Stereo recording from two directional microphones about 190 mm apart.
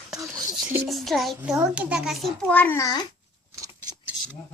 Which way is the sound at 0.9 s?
Centre (ahead or behind).